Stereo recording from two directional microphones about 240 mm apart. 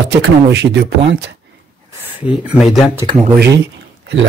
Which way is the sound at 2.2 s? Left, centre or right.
Centre.